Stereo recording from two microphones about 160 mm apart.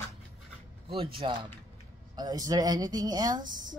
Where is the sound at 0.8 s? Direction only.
35° right (ahead or behind).